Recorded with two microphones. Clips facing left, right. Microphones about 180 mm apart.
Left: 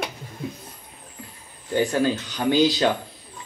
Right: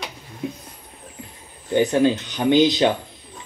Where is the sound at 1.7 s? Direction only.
20° right (ahead or behind).